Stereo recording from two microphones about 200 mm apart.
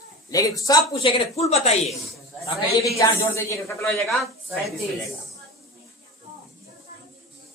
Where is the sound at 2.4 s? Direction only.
15° left (ahead or behind).